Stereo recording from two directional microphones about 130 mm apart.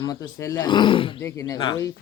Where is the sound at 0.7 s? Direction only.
40° left (ahead or behind).